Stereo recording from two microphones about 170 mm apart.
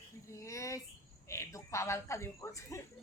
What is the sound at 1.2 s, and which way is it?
Speech, 15° left (ahead or behind).